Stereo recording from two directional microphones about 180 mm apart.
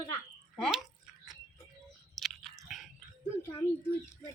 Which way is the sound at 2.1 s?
Centre (ahead or behind).